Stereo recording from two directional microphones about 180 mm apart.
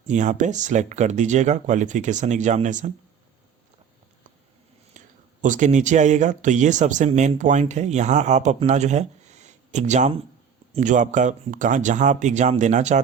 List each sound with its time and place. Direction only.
0.1 s speech: 45° right (ahead or behind)
4.9 s speech: 45° right (ahead or behind)